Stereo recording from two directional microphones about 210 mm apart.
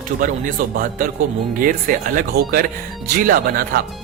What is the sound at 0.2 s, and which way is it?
Speech, 40° right (ahead or behind).